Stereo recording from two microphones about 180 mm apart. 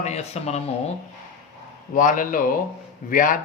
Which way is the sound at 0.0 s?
35° left (ahead or behind).